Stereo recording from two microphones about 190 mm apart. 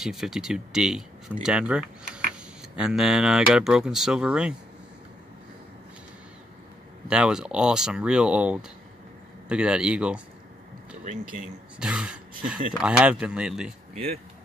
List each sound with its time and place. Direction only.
0.0 s speech: centre (ahead or behind)
7.1 s speech: 5° right (ahead or behind)
11.8 s speech: 5° right (ahead or behind)
13.9 s speech: 35° right (ahead or behind)